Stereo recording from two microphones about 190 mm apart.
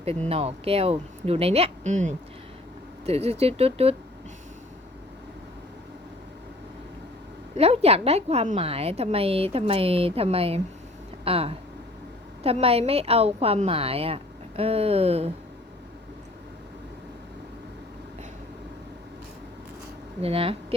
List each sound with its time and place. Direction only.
0.3 s a woman's voice: 30° right (ahead or behind)
7.5 s a woman's voice: 35° right (ahead or behind)
20.2 s speech: 30° right (ahead or behind)